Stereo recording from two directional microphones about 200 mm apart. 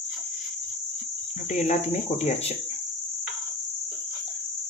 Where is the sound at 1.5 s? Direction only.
35° left (ahead or behind).